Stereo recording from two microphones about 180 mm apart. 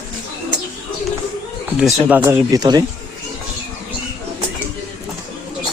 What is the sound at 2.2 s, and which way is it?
Speech, 20° right (ahead or behind).